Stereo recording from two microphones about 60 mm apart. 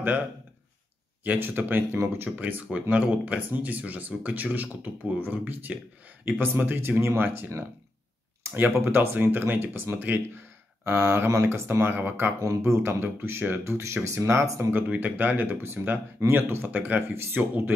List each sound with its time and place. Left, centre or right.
1.2 s speech: right
7.0 s speech: right
7.2 s speech: right
8.5 s speech: right
10.8 s speech: right
12.4 s speech: right
12.8 s speech: right
14.9 s speech: right
16.6 s speech: right
17.1 s speech: right